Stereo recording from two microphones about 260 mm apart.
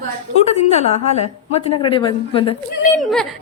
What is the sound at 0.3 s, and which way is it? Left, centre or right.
A woman's voice, left.